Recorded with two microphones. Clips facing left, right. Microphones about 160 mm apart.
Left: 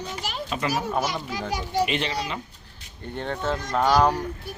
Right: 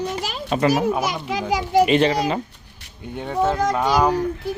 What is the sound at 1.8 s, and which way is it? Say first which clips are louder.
Speech: right 10 dB; 45° right (ahead or behind).